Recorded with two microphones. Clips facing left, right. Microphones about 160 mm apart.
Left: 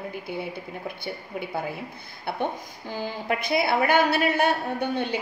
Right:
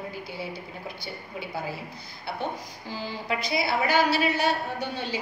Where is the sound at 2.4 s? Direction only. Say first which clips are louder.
Left 3 dB; 55° left (ahead or behind).